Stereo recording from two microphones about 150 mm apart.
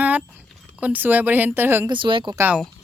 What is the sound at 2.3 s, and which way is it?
Speech, 10° right (ahead or behind).